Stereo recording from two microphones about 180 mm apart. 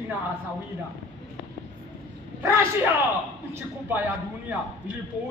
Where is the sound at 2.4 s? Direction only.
10° right (ahead or behind).